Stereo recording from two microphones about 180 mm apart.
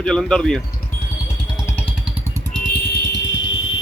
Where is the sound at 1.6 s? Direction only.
10° left (ahead or behind).